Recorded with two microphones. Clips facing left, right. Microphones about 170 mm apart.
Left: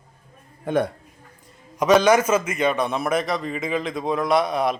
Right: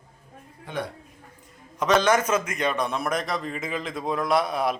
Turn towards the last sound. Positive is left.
turn(degrees=-5)  # may be behind; listen again after turning